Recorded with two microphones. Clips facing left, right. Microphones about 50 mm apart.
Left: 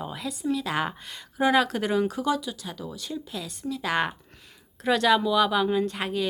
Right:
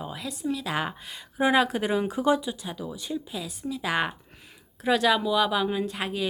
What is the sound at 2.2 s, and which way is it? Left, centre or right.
Speech, right.